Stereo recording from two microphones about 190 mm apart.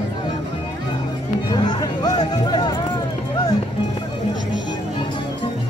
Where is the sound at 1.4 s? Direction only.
25° left (ahead or behind).